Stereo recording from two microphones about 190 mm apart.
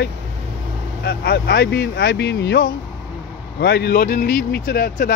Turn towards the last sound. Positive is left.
turn(degrees=55)  # may be behind; listen again after turning